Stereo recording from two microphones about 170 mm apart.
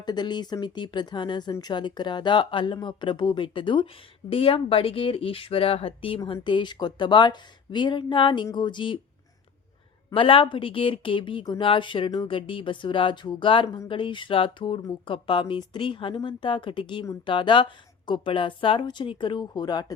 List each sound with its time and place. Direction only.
0.0 s speech: 25° left (ahead or behind)
10.1 s speech: 30° left (ahead or behind)